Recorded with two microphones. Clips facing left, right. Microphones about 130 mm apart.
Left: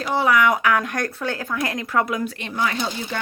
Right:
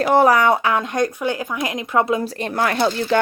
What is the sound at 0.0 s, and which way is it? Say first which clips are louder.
Speech: right 8 dB; 55° right (ahead or behind).